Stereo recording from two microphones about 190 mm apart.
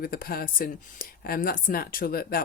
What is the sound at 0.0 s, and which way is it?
Speech, 50° left (ahead or behind).